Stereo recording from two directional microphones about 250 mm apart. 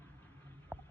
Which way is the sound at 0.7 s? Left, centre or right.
Centre.